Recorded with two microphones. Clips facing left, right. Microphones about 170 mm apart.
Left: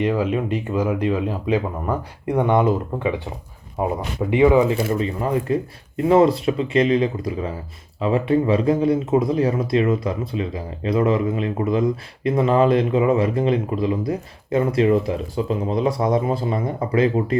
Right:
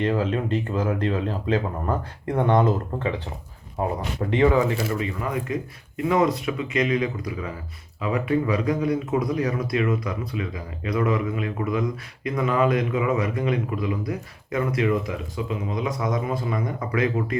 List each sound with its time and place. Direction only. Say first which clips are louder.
0.0 s speech: left 3 dB; 10° left (ahead or behind)
4.9 s speech: left 5 dB; 30° left (ahead or behind)